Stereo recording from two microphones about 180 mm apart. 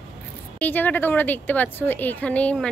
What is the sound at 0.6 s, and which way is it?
A woman's voice, 10° left (ahead or behind).